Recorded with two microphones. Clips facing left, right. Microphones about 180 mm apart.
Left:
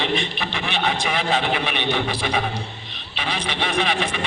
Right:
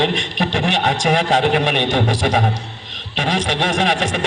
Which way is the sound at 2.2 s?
45° right (ahead or behind).